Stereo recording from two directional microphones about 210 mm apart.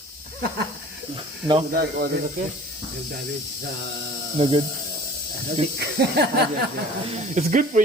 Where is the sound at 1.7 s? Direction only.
45° right (ahead or behind).